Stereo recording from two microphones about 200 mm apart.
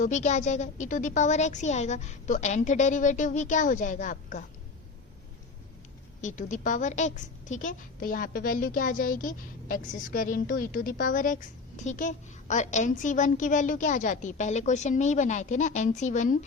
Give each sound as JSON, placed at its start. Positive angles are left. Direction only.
{"t": 0.0, "sound": "a woman's voice", "side_deg": 35}
{"t": 6.2, "sound": "a woman's voice", "side_deg": 40}